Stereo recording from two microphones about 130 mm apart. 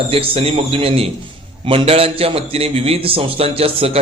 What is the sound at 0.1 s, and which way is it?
A man's voice, 50° right (ahead or behind).